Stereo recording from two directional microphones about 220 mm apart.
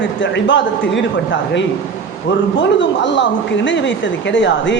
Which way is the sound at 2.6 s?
55° left (ahead or behind).